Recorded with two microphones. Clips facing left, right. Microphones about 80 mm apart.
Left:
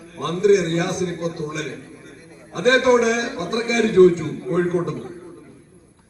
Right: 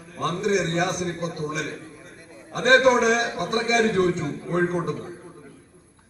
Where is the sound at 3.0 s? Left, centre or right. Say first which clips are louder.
Left 1 dB; right.